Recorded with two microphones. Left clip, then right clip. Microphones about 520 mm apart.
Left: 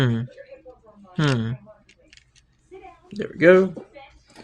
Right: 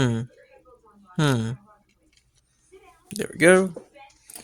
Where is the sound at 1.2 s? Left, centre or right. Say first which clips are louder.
Even; right.